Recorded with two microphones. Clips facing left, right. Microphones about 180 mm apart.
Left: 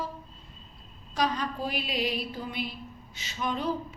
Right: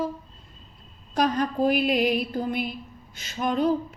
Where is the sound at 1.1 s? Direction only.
50° right (ahead or behind).